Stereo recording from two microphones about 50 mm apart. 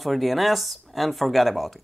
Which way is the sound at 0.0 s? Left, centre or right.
Centre.